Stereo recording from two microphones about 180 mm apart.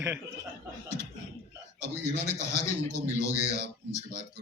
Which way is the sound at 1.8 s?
40° left (ahead or behind).